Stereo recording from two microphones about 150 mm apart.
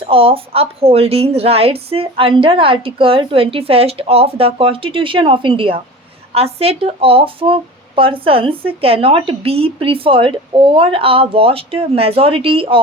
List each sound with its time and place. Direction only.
0.0 s speech: 35° right (ahead or behind)